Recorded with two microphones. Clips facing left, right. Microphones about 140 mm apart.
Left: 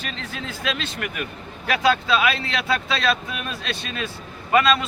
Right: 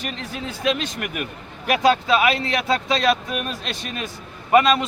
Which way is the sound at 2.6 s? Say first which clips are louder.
Right 3 dB; 20° right (ahead or behind).